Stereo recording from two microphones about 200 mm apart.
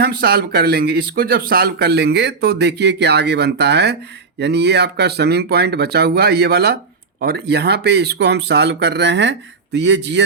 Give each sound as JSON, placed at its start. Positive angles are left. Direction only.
{"t": 0.0, "sound": "speech", "side_deg": -50}